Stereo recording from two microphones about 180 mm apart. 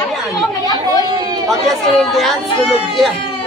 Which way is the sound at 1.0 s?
20° right (ahead or behind).